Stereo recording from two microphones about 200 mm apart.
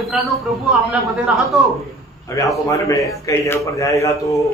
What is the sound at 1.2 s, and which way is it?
Speech, centre (ahead or behind).